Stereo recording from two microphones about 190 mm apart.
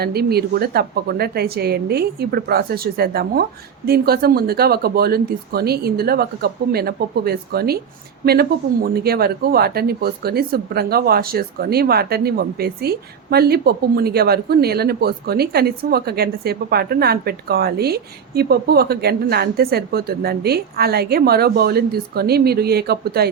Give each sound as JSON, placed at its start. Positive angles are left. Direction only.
{"t": 0.0, "sound": "speech", "side_deg": -55}